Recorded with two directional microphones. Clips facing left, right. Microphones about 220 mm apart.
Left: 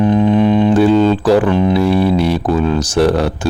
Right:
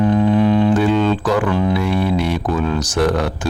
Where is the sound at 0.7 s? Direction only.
35° left (ahead or behind).